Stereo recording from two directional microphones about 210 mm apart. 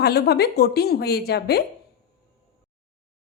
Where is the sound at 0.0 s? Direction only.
50° left (ahead or behind).